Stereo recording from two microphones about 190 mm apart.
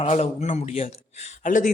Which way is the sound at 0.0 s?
35° left (ahead or behind).